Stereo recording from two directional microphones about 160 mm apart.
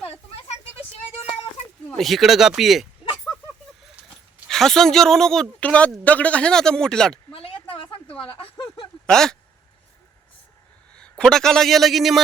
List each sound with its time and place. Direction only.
2.0 s a woman's voice: centre (ahead or behind)
4.4 s a woman's voice: 5° left (ahead or behind)
7.3 s a sound: 35° left (ahead or behind)
8.2 s speech: 35° left (ahead or behind)
9.0 s speech: 5° left (ahead or behind)
10.9 s a man's voice: 5° left (ahead or behind)